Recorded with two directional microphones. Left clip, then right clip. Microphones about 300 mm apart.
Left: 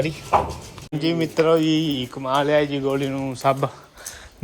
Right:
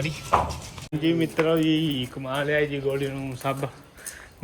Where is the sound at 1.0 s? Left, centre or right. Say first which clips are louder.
Left 3 dB; left.